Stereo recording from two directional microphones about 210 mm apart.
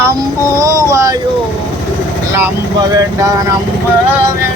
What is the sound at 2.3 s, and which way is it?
Speech, 15° right (ahead or behind).